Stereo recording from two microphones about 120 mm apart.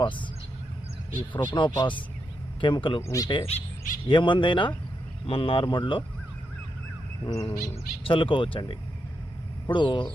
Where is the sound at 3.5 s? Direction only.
60° left (ahead or behind).